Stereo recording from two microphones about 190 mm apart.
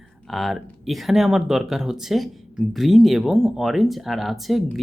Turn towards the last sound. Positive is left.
turn(degrees=0)  # may be behind; listen again after turning